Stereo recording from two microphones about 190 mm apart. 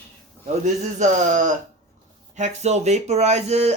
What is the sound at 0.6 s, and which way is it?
Speech, 40° right (ahead or behind).